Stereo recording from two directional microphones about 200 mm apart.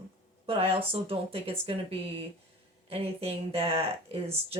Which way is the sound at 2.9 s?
30° right (ahead or behind).